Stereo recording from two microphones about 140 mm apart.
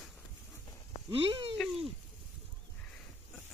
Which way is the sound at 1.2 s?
40° right (ahead or behind).